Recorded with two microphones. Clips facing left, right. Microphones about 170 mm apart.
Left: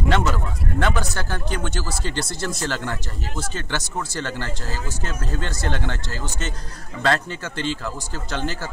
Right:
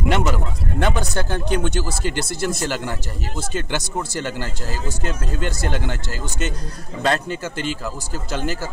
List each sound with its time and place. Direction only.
0.1 s a man's voice: 15° right (ahead or behind)
7.4 s speech: 10° right (ahead or behind)